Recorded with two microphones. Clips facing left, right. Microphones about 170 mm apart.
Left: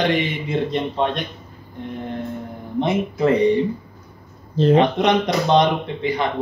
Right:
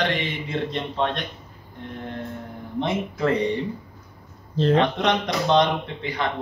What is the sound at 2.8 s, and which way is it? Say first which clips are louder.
Speech: left 5 dB; 15° left (ahead or behind).